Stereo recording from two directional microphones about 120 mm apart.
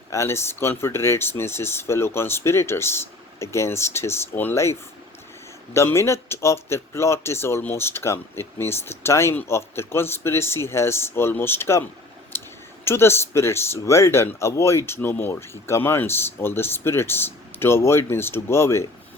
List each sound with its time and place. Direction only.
0.1 s speech: 25° left (ahead or behind)
12.3 s a sound: 20° left (ahead or behind)
12.8 s speech: 20° left (ahead or behind)